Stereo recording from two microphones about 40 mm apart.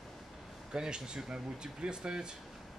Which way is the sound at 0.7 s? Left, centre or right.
Centre.